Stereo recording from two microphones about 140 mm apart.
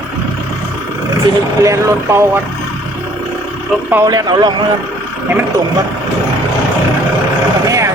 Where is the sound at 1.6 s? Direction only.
20° right (ahead or behind).